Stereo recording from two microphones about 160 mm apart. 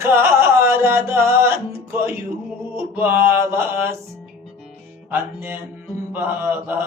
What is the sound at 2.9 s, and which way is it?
Music, 15° right (ahead or behind).